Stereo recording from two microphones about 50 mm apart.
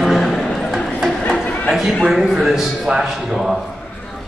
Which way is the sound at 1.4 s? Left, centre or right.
Left.